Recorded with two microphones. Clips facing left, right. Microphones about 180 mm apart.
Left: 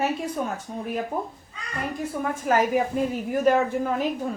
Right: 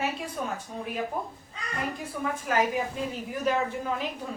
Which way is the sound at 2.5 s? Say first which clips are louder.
Left 6 dB; 45° left (ahead or behind).